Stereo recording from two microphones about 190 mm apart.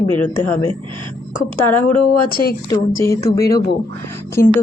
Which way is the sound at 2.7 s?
15° left (ahead or behind).